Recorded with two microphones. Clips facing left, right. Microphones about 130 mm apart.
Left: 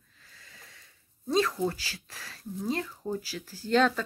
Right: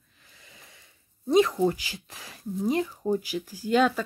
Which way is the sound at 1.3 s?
20° right (ahead or behind).